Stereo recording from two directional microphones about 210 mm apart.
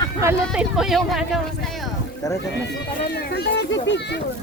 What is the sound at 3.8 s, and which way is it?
Speech, 55° left (ahead or behind).